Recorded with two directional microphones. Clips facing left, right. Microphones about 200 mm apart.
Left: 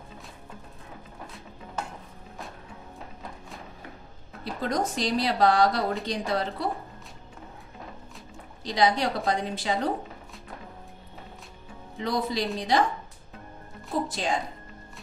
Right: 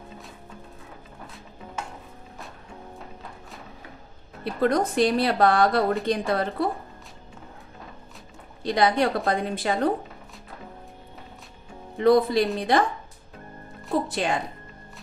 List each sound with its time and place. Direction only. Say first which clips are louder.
4.6 s a woman's voice: right 7 dB; 60° right (ahead or behind)
8.6 s a woman's voice: right 3 dB; 55° right (ahead or behind)
12.0 s a woman's voice: right 9 dB; 55° right (ahead or behind)
14.0 s a woman's voice: right 3 dB; 60° right (ahead or behind)